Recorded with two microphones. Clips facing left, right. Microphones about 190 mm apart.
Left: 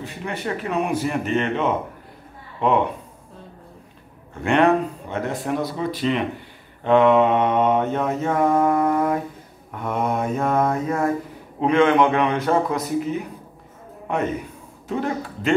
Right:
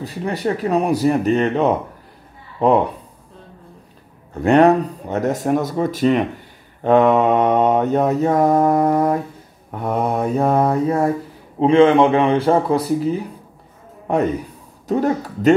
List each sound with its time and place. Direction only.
0.0 s mantra: 35° right (ahead or behind)
4.3 s speech: 40° right (ahead or behind)
6.8 s mantra: 40° right (ahead or behind)
14.0 s a man's voice: 35° right (ahead or behind)
14.9 s mantra: 40° right (ahead or behind)